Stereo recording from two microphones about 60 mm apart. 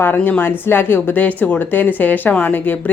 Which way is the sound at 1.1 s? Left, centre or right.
Left.